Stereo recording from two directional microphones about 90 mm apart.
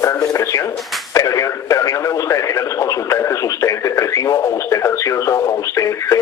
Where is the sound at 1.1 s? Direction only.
35° left (ahead or behind).